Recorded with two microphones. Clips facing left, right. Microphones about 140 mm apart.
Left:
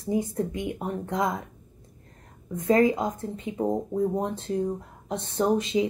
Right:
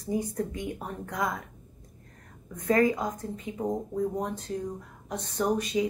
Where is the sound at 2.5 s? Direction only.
25° left (ahead or behind).